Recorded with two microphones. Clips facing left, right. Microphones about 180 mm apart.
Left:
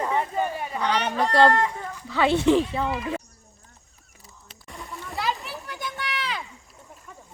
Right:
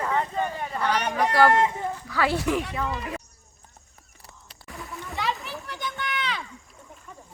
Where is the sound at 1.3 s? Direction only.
25° left (ahead or behind).